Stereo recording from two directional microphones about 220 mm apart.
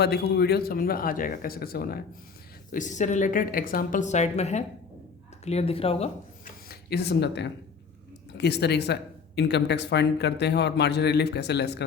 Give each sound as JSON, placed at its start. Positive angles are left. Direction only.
{"t": 0.0, "sound": "a woman's voice", "side_deg": 50}
{"t": 6.4, "sound": "a sound", "side_deg": 45}
{"t": 8.4, "sound": "speech", "side_deg": 50}